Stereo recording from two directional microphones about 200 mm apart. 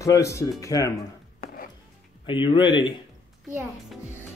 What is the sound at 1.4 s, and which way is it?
Chopping, 45° left (ahead or behind).